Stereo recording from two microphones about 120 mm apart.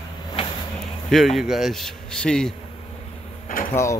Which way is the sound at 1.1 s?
Centre (ahead or behind).